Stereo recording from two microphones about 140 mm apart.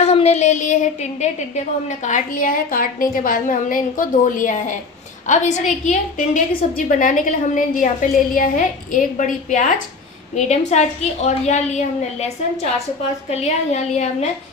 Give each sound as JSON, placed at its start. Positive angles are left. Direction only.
{"t": 0.0, "sound": "a woman's voice", "side_deg": 50}
{"t": 5.2, "sound": "a woman's voice", "side_deg": 60}
{"t": 10.3, "sound": "a woman's voice", "side_deg": 55}
{"t": 13.4, "sound": "a woman's voice", "side_deg": 50}